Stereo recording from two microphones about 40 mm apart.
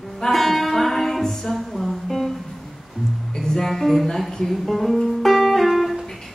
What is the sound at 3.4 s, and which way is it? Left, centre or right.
Music, centre.